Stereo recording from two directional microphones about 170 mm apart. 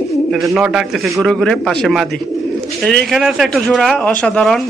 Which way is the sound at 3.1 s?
Centre (ahead or behind).